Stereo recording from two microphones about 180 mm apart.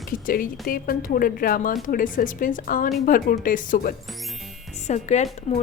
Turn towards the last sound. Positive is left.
turn(degrees=40)  # may be behind; listen again after turning